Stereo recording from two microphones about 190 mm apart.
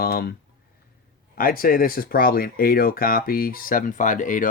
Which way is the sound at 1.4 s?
50° left (ahead or behind).